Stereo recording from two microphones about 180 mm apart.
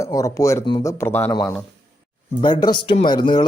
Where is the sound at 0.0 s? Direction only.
15° left (ahead or behind).